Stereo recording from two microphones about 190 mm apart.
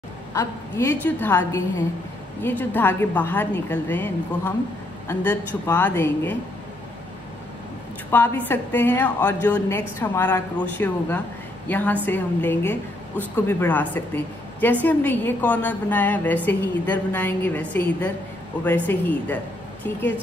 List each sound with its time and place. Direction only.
0.3 s a woman's voice: 15° left (ahead or behind)
8.1 s a woman's voice: 10° left (ahead or behind)